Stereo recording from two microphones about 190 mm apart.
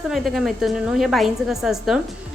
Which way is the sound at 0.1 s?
Centre (ahead or behind).